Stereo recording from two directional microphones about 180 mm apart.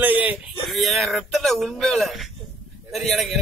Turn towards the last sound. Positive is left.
turn(degrees=0)  # may be behind; listen again after turning